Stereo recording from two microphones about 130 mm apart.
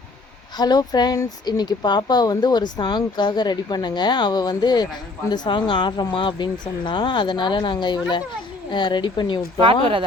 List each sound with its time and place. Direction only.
0.5 s speech: 30° left (ahead or behind)